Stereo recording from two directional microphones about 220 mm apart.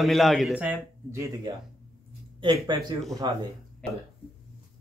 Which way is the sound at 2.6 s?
20° right (ahead or behind).